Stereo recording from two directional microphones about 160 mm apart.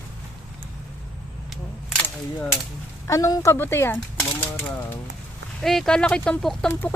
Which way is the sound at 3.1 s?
20° left (ahead or behind).